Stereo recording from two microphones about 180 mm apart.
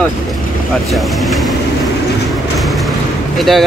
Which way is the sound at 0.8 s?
Centre (ahead or behind).